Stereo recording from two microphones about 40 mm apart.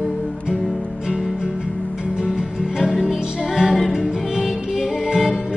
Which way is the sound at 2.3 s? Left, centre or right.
Centre.